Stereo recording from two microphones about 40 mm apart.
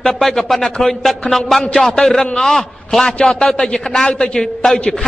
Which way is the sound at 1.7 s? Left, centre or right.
Centre.